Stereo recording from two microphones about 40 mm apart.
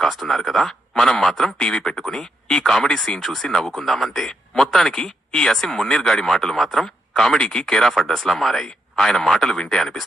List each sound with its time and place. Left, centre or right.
0.0 s speech: centre
1.5 s speech: centre
3.2 s speech: centre